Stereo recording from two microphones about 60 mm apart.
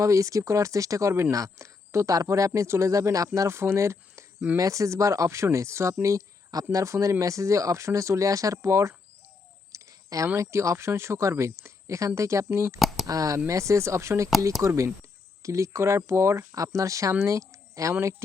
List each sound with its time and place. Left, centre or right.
0.0 s speech: right
2.9 s speech: right
3.5 s speech: right
4.5 s speech: right
9.7 s a sound: right
10.3 s speech: right
13.1 s speech: right
13.5 s speech: right
15.4 s speech: right